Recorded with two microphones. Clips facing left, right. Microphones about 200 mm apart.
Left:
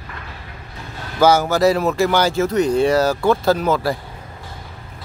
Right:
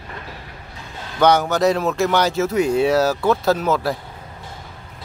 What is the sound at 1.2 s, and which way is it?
Speech, 5° left (ahead or behind).